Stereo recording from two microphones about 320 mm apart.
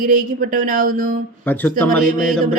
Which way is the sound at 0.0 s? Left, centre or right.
Right.